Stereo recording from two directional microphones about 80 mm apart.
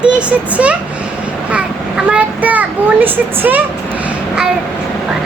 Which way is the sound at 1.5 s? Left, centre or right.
Centre.